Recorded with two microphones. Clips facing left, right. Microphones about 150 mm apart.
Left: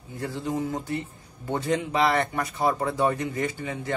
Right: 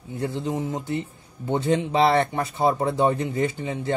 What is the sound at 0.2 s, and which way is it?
Speech, 25° right (ahead or behind).